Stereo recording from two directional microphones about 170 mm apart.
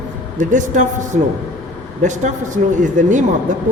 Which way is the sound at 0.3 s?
50° right (ahead or behind).